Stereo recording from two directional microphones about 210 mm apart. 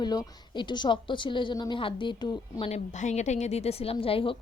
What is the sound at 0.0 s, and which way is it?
A woman's voice, 20° left (ahead or behind).